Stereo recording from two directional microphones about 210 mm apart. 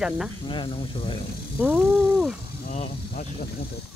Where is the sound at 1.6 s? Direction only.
5° right (ahead or behind).